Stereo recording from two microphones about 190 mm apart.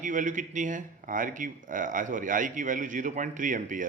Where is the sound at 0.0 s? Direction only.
40° right (ahead or behind).